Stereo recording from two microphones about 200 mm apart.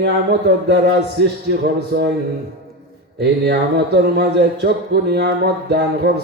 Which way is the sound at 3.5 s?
55° right (ahead or behind).